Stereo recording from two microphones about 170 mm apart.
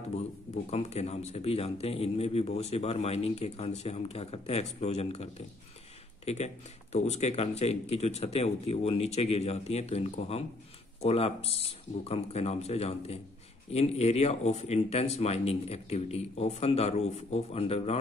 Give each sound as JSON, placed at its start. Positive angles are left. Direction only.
{"t": 0.7, "sound": "a man's voice", "side_deg": 40}